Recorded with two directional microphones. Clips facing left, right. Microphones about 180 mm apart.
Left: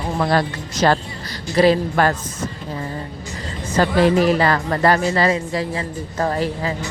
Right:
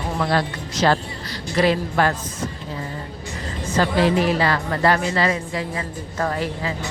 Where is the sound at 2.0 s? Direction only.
50° left (ahead or behind).